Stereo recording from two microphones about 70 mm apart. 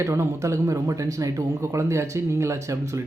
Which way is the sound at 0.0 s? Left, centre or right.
Right.